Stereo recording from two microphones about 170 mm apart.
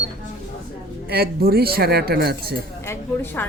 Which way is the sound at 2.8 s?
15° left (ahead or behind).